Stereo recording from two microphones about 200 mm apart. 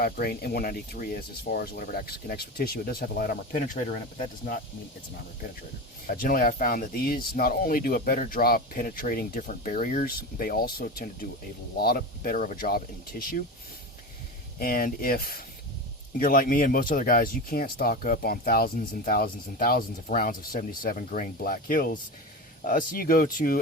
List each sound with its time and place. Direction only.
0.0 s speech: 50° left (ahead or behind)
6.1 s speech: 45° left (ahead or behind)
14.6 s speech: 45° left (ahead or behind)